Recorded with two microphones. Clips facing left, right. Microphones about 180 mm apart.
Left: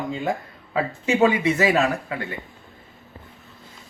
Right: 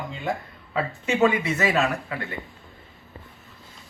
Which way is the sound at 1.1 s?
30° left (ahead or behind).